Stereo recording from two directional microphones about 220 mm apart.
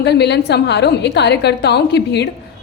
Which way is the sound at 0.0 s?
50° left (ahead or behind).